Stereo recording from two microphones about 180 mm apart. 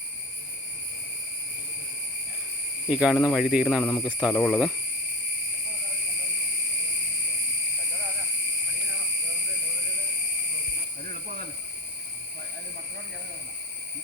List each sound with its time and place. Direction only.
2.9 s speech: 5° right (ahead or behind)
3.8 s speech: 15° left (ahead or behind)
4.1 s speech: 5° right (ahead or behind)
11.1 s cricket: 60° right (ahead or behind)